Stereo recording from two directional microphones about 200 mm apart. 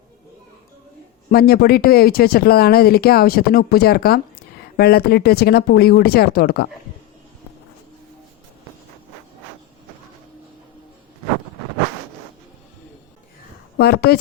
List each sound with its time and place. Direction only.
1.3 s speech: 50° left (ahead or behind)
13.7 s a woman's voice: 55° left (ahead or behind)